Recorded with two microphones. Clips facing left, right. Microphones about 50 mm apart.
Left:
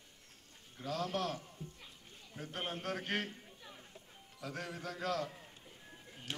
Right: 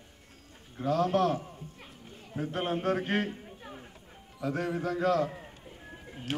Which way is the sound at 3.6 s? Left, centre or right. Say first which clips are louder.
Right 9 dB; right.